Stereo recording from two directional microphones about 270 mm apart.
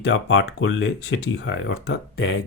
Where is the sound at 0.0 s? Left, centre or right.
Left.